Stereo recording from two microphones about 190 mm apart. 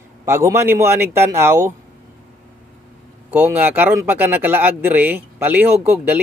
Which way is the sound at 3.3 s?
10° right (ahead or behind).